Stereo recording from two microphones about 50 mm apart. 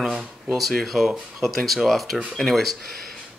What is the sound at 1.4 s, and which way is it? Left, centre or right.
Speech, centre.